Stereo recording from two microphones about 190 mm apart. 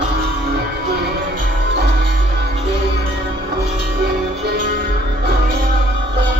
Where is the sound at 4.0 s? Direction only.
55° right (ahead or behind).